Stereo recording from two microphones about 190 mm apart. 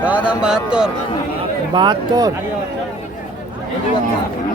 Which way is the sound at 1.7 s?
25° right (ahead or behind).